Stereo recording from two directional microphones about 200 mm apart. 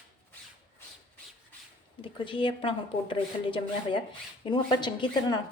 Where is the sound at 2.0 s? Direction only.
25° left (ahead or behind).